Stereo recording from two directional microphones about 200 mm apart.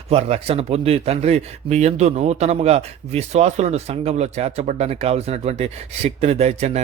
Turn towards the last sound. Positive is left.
turn(degrees=-30)  # may be behind; listen again after turning